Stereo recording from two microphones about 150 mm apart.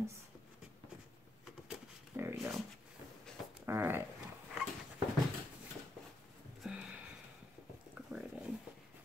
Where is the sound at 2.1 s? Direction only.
20° right (ahead or behind).